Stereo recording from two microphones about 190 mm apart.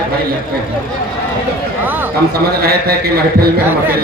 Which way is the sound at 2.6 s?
55° right (ahead or behind).